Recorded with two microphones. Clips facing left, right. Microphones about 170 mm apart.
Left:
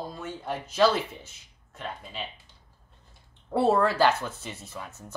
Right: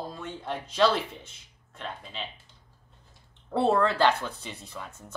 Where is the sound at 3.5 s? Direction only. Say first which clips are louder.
Left 1 dB; 10° left (ahead or behind).